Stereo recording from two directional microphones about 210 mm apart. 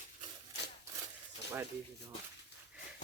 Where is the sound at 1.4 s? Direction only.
55° left (ahead or behind).